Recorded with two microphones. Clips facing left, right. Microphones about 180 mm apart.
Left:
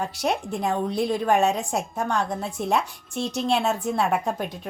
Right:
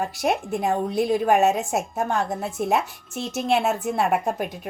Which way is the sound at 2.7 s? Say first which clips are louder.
Right 1 dB; 20° right (ahead or behind).